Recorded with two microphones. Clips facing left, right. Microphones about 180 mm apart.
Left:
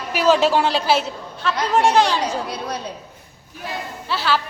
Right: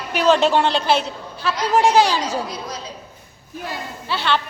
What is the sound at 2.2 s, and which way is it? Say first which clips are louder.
Speech: left 1 dB; 65° left (ahead or behind).